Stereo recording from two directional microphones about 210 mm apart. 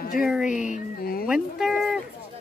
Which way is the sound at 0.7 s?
40° left (ahead or behind).